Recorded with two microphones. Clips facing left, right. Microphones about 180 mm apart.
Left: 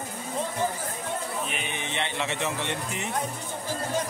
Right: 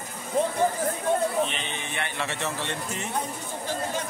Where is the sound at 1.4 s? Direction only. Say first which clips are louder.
Right 2 dB; 10° left (ahead or behind).